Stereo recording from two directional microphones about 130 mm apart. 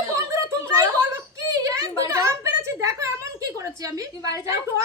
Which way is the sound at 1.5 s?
25° right (ahead or behind).